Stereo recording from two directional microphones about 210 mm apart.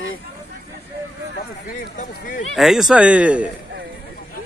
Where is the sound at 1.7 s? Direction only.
35° left (ahead or behind).